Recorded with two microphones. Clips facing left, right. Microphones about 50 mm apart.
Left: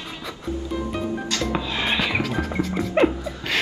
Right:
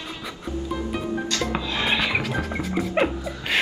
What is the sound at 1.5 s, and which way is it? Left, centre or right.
Music, centre.